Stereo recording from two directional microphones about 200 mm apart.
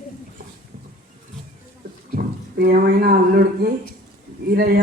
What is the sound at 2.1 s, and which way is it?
A man's voice, 50° right (ahead or behind).